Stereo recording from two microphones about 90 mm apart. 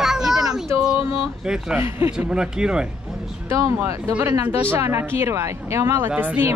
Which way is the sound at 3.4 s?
35° right (ahead or behind).